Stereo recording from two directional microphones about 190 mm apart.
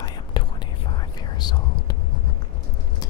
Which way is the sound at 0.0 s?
25° left (ahead or behind).